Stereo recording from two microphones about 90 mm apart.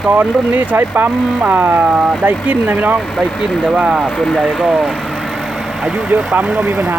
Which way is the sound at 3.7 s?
5° right (ahead or behind).